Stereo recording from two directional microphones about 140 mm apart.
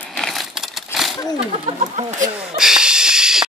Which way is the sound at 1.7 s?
55° right (ahead or behind).